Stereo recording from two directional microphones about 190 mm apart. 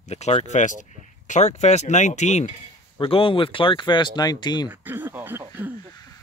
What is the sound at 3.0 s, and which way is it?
Speech, 30° left (ahead or behind).